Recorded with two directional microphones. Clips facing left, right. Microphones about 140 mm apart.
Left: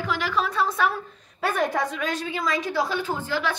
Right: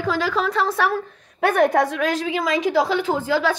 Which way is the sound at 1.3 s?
65° right (ahead or behind).